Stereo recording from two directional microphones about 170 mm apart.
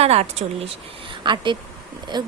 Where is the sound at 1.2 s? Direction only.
25° right (ahead or behind).